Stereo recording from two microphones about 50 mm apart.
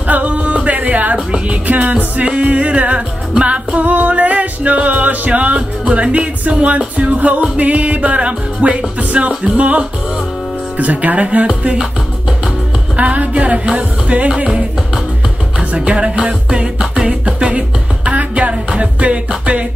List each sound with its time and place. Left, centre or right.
0.1 s music: right
12.9 s music: right
14.3 s music: centre
15.7 s music: right